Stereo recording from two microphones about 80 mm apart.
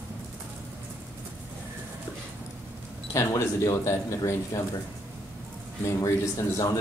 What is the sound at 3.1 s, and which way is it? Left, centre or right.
Speech, left.